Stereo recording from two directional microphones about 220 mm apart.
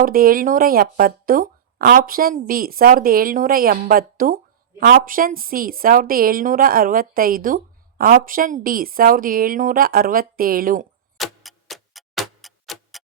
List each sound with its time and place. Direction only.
0.0 s a woman's voice: 40° right (ahead or behind)
11.2 s tick-tock: centre (ahead or behind)